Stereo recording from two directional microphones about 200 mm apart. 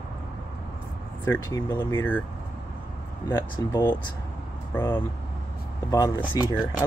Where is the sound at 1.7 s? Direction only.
20° left (ahead or behind).